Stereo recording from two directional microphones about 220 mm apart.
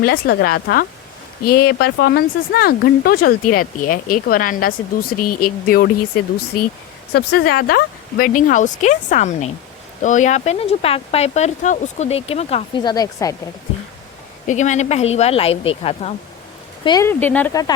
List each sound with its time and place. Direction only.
0.0 s speech: 45° left (ahead or behind)
7.1 s speech: 45° left (ahead or behind); by 13.3 s 15° left (ahead or behind)
14.4 s speech: 35° left (ahead or behind)
16.8 s speech: 15° left (ahead or behind)